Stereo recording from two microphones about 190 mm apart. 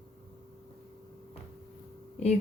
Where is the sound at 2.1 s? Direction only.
35° left (ahead or behind).